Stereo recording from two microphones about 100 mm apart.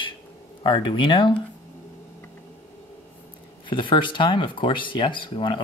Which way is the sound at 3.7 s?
55° left (ahead or behind).